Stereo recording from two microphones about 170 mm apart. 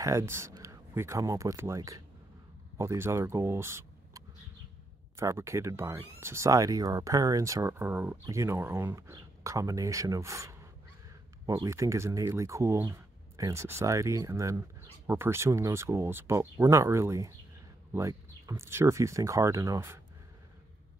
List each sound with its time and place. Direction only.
0.0 s speech: 15° right (ahead or behind)